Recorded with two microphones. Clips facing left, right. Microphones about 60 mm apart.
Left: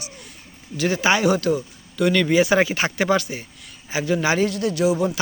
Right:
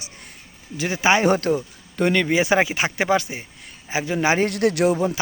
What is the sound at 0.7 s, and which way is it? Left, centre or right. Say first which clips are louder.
Speech: even; right.